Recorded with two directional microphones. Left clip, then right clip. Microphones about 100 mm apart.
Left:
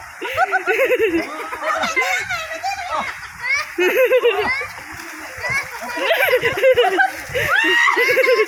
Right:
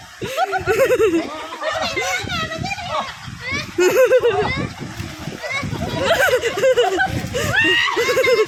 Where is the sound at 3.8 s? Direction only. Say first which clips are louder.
Right 3 dB; 65° right (ahead or behind).